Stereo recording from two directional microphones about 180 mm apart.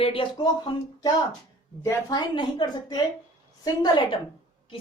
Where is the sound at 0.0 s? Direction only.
30° left (ahead or behind).